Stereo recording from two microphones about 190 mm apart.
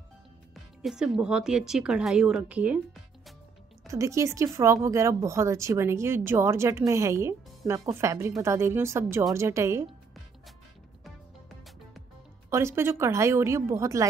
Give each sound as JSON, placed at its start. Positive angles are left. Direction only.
{"t": 0.8, "sound": "speech", "side_deg": -5}
{"t": 3.8, "sound": "speech", "side_deg": -15}
{"t": 12.4, "sound": "speech", "side_deg": -15}